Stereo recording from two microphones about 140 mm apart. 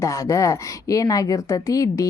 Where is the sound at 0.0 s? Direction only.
20° left (ahead or behind).